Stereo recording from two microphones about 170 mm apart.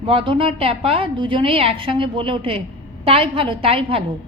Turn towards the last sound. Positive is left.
turn(degrees=-35)  # may be behind; listen again after turning